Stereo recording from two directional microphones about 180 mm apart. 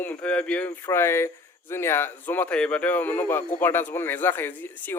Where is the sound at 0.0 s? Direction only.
10° left (ahead or behind).